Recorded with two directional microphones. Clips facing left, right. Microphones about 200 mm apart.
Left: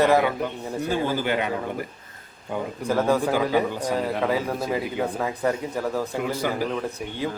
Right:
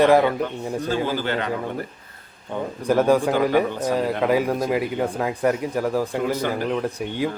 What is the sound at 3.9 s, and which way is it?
Speech, 10° right (ahead or behind).